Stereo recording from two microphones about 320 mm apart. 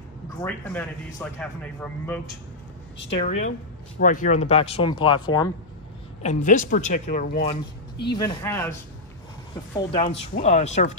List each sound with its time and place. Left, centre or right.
0.4 s speech: centre
3.3 s speech: left
6.2 s speech: left
8.1 s speech: centre
9.8 s speech: left